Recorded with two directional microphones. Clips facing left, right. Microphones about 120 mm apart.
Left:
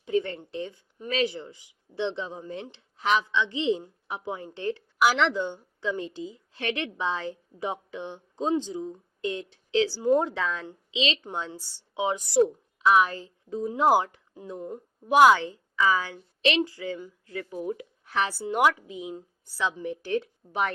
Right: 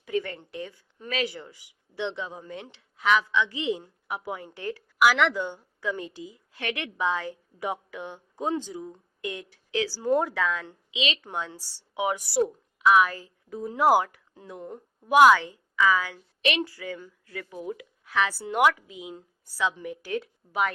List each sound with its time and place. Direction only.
0.0 s a woman's voice: 30° left (ahead or behind)
14.6 s a woman's voice: 10° left (ahead or behind)
15.1 s a woman's voice: 30° left (ahead or behind)